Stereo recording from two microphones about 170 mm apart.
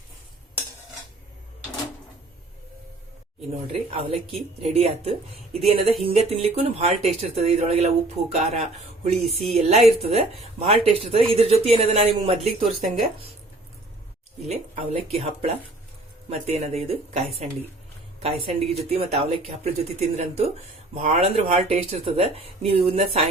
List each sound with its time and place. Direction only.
3.7 s speech: 35° right (ahead or behind)
12.6 s speech: centre (ahead or behind)
14.4 s speech: 40° right (ahead or behind)